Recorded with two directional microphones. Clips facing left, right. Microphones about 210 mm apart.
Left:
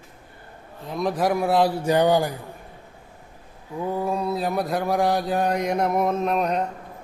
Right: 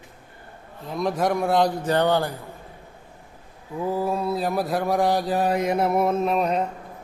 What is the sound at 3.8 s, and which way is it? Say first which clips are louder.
Mantra: right 1 dB; 5° right (ahead or behind).